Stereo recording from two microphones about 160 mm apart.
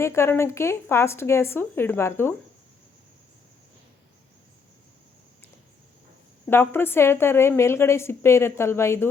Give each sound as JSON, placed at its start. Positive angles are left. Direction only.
{"t": 0.0, "sound": "a woman's voice", "side_deg": 15}
{"t": 6.5, "sound": "a woman's voice", "side_deg": 15}